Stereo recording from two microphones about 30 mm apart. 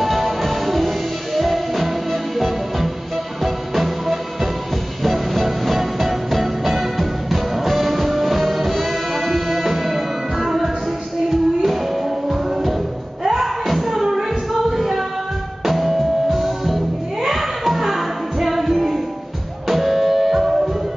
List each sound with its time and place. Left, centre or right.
0.0 s music: centre
13.2 s music: centre